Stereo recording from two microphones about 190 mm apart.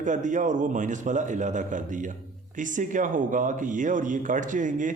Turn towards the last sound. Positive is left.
turn(degrees=-45)  # may be behind; listen again after turning